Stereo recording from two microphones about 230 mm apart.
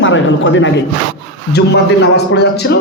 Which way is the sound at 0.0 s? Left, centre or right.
Left.